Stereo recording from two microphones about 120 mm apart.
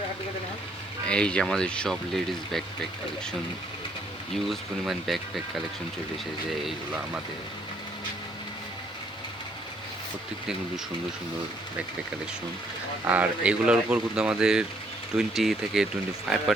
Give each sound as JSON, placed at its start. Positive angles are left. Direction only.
{"t": 1.0, "sound": "speech", "side_deg": 10}
{"t": 4.4, "sound": "speech", "side_deg": 0}
{"t": 13.1, "sound": "speech", "side_deg": -10}